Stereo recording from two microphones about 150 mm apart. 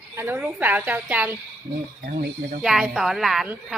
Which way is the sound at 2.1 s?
90° right.